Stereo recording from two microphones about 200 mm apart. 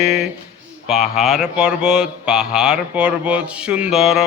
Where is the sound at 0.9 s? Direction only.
Centre (ahead or behind).